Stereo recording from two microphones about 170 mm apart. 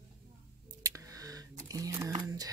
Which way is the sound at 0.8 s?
20° right (ahead or behind).